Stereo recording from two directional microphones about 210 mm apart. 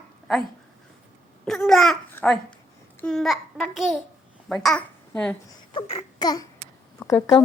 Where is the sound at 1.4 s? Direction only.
Centre (ahead or behind).